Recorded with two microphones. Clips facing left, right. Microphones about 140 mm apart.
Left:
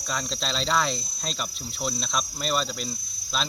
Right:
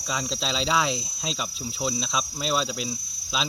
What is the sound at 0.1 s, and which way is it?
Cricket, 5° right (ahead or behind).